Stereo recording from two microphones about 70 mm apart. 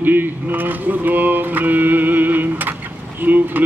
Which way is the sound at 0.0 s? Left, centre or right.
Right.